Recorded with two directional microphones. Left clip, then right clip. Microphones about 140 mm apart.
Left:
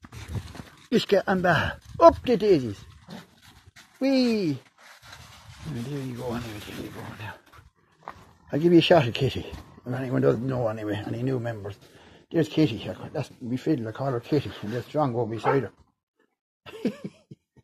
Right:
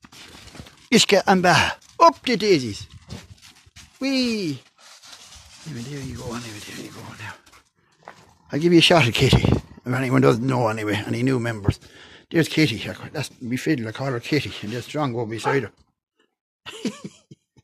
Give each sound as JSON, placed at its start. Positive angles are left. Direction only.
{"t": 0.8, "sound": "speech", "side_deg": -45}
{"t": 4.0, "sound": "speech", "side_deg": -10}
{"t": 5.7, "sound": "speech", "side_deg": -10}
{"t": 8.5, "sound": "speech", "side_deg": -30}
{"t": 12.3, "sound": "speech", "side_deg": -50}
{"t": 16.6, "sound": "a sound", "side_deg": -15}